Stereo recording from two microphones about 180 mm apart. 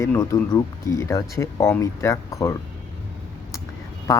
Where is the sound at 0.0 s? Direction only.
15° left (ahead or behind).